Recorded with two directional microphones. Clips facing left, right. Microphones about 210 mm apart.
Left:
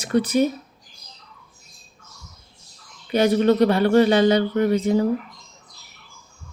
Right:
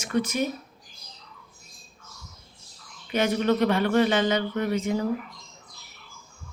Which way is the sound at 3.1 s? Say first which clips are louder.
Left 6 dB; 35° left (ahead or behind).